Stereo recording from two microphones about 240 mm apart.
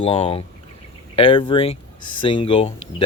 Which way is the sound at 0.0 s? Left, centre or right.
Left.